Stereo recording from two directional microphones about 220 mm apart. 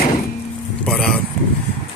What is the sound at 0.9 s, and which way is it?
Vehicle, centre (ahead or behind).